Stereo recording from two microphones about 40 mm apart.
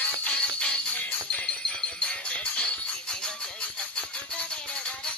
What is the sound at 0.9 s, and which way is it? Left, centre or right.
Music, left.